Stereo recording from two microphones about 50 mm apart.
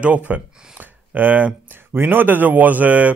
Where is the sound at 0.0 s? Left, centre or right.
Right.